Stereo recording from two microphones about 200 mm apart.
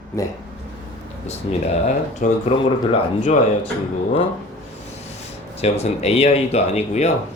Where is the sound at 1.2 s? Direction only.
35° left (ahead or behind).